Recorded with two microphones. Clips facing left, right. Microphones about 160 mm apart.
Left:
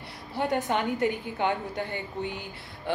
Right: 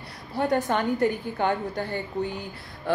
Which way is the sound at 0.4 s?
20° left (ahead or behind).